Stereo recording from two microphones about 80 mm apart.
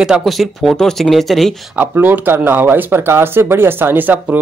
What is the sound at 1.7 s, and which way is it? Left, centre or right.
Speech, right.